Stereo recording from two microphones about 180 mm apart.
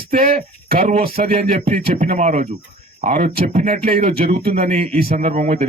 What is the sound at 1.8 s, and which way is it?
Speech, 45° right (ahead or behind).